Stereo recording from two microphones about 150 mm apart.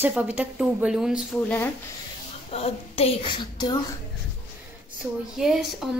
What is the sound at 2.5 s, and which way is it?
A woman's voice, 45° left (ahead or behind).